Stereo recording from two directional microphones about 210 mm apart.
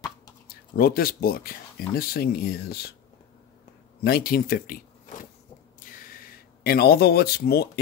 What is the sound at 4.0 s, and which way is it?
Speech, 45° left (ahead or behind).